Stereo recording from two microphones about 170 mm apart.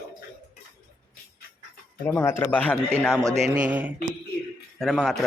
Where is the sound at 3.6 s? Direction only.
10° right (ahead or behind).